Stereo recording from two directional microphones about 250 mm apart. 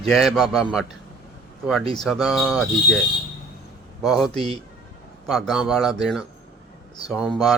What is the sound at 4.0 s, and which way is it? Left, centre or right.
A man's voice, centre.